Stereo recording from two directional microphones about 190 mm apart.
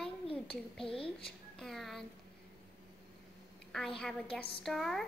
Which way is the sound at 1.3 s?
Centre (ahead or behind).